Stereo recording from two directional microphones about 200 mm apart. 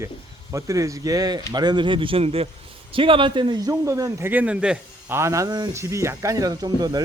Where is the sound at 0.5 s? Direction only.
15° right (ahead or behind).